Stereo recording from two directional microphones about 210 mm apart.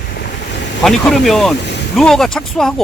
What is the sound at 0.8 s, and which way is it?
Speech, centre (ahead or behind).